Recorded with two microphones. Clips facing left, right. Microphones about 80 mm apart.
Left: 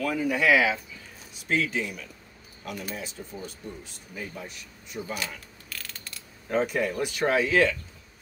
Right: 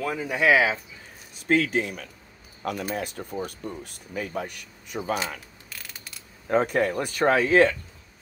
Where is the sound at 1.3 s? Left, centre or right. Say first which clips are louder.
Right 5 dB; right.